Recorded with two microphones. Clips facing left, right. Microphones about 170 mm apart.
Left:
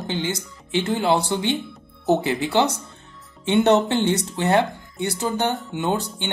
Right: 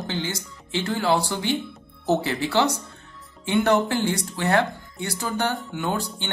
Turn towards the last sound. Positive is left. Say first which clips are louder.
# left 3 dB
turn(degrees=20)  # may be behind; listen again after turning